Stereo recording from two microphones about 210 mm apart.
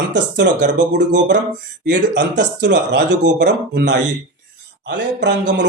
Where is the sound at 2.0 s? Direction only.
55° right (ahead or behind).